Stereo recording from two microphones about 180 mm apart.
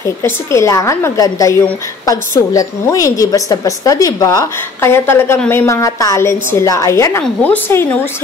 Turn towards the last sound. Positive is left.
turn(degrees=10)  # may be behind; listen again after turning